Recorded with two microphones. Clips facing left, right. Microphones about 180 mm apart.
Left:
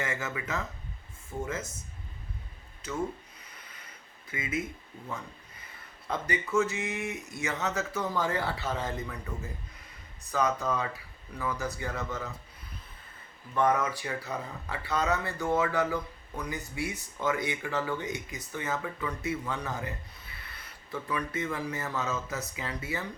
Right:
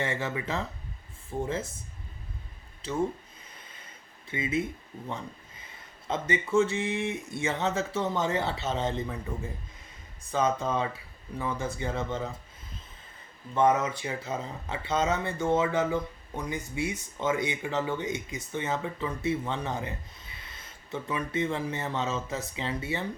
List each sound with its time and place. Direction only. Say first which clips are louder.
0.0 s speech: right 3 dB; 30° right (ahead or behind)
2.8 s speech: right 3 dB; 30° right (ahead or behind)
4.3 s speech: right 4 dB; 30° right (ahead or behind)
6.1 s speech: right 3 dB; 25° right (ahead or behind)
13.5 s speech: right 2 dB; 20° right (ahead or behind)